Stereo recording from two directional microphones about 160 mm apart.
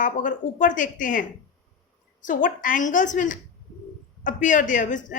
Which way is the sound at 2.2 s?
55° left (ahead or behind).